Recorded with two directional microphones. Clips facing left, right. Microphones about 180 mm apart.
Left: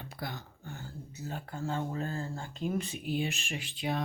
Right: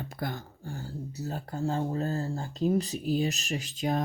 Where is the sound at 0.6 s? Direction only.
35° right (ahead or behind).